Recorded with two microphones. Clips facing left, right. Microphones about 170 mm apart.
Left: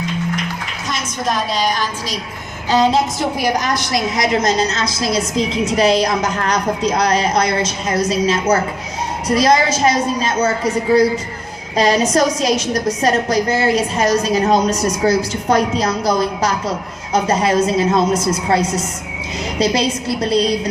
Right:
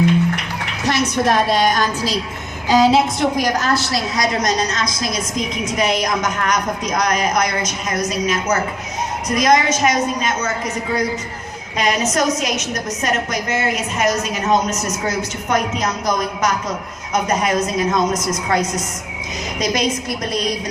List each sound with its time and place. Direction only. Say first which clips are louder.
0.9 s a woman's voice: right 5 dB; 70° right (ahead or behind)
2.6 s a woman's voice: right 1 dB; 10° right (ahead or behind)
3.3 s a woman's voice: even; 10° left (ahead or behind); by 20.6 s 30° left (ahead or behind)